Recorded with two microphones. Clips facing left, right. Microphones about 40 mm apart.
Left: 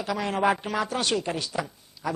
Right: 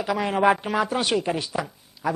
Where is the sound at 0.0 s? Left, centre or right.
Centre.